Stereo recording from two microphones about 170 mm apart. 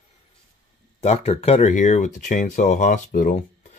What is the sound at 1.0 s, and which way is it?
Speech, 40° left (ahead or behind).